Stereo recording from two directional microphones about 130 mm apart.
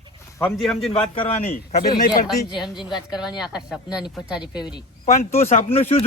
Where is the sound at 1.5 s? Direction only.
90° left.